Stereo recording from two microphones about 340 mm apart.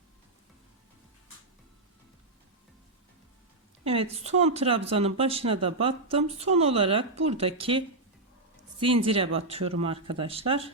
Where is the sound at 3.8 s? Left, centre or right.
Centre.